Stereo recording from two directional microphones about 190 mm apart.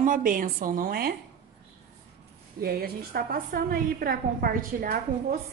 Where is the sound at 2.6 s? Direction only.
55° right (ahead or behind).